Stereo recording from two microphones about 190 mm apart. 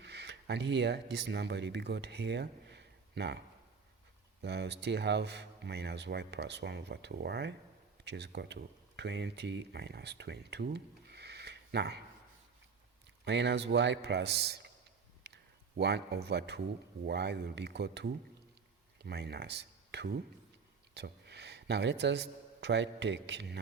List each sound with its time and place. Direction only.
0.0 s speech: 65° right (ahead or behind)
4.4 s speech: 65° right (ahead or behind)
13.2 s speech: 65° right (ahead or behind)
15.8 s speech: 60° right (ahead or behind)